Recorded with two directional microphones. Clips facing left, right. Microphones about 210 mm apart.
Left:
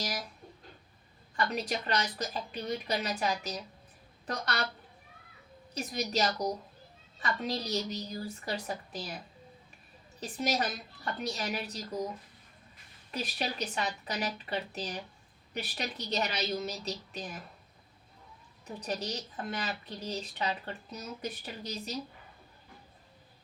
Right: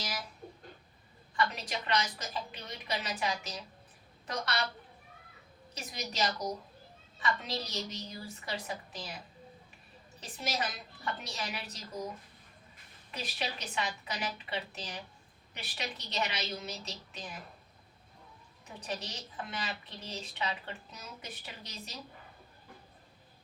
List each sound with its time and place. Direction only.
0.0 s a sound: 40° left (ahead or behind)
1.4 s speech: 40° left (ahead or behind)
5.7 s speech: 40° left (ahead or behind)
10.2 s speech: 40° left (ahead or behind)
13.1 s speech: 40° left (ahead or behind)
18.9 s speech: 40° left (ahead or behind)